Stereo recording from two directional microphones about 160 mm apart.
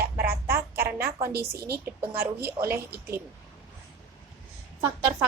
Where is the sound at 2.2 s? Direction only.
15° right (ahead or behind).